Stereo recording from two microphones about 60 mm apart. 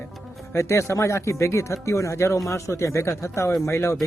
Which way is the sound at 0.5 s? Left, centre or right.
Left.